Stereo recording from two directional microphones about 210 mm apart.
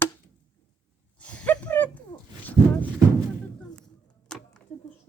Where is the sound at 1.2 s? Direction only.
5° left (ahead or behind).